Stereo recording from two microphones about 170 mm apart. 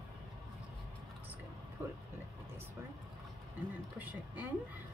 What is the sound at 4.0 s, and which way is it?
Speech, 10° right (ahead or behind).